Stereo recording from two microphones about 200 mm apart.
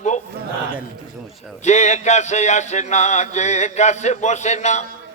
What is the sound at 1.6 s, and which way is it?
A man's voice, 35° left (ahead or behind).